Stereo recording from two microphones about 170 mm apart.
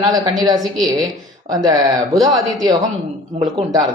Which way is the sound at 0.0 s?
25° right (ahead or behind).